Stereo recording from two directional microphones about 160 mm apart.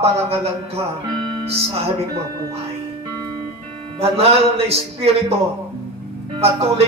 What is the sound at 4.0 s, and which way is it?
Speech, 40° right (ahead or behind).